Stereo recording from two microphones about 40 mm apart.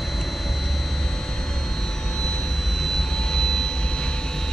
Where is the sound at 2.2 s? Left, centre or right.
Centre.